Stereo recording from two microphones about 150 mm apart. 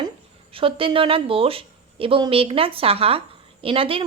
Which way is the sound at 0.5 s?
35° right (ahead or behind).